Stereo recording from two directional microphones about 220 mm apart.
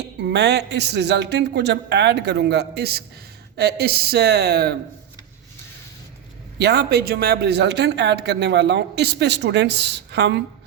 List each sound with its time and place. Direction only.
0.0 s a man's voice: 50° right (ahead or behind)
6.6 s a man's voice: 50° right (ahead or behind)